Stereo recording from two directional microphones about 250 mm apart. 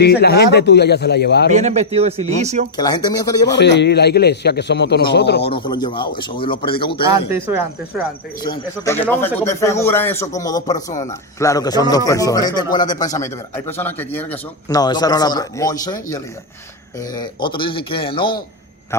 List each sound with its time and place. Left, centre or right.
0.0 s a man's voice: left
1.5 s a man's voice: right
2.7 s speech: centre
3.6 s a man's voice: left
5.5 s speech: centre
7.1 s speech: centre
8.4 s speech: centre